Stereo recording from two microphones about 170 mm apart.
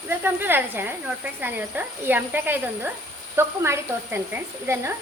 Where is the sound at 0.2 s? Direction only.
10° right (ahead or behind).